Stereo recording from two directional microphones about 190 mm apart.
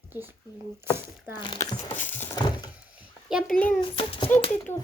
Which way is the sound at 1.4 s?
20° left (ahead or behind).